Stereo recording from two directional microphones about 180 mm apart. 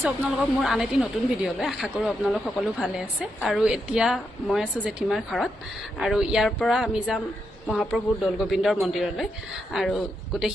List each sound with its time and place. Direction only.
0.0 s a woman's voice: centre (ahead or behind)